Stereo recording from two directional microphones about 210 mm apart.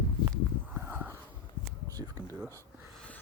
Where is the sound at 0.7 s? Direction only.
10° right (ahead or behind).